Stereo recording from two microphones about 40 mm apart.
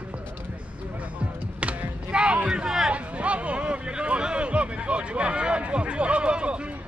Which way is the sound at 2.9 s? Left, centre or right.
Right.